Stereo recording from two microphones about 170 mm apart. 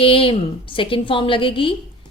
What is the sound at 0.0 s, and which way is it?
A woman's voice, 30° left (ahead or behind).